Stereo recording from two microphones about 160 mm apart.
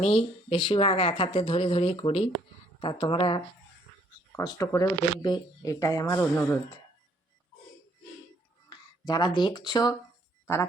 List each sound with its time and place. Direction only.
0.0 s speech: 35° left (ahead or behind)
4.3 s speech: 20° left (ahead or behind)
8.7 s speech: 25° left (ahead or behind)